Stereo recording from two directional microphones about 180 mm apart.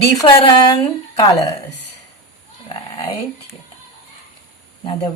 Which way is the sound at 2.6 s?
25° left (ahead or behind).